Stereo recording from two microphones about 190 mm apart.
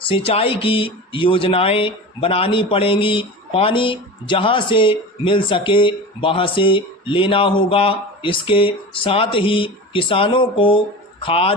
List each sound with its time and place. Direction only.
0.1 s speech: 30° left (ahead or behind)